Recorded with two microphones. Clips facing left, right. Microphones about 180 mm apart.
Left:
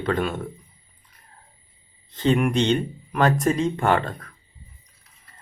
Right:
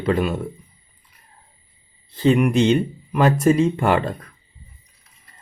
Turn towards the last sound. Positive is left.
turn(degrees=-10)  # may be behind; listen again after turning